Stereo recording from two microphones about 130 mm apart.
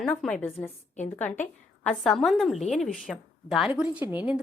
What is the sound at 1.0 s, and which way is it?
A woman's voice, 15° left (ahead or behind).